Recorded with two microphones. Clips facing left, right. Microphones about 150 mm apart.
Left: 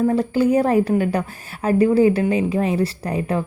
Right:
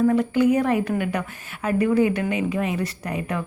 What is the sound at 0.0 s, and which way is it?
Speech, 30° left (ahead or behind).